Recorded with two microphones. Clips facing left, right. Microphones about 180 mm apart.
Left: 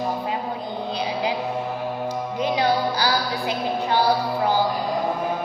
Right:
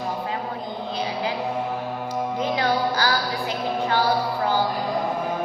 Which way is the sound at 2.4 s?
15° left (ahead or behind).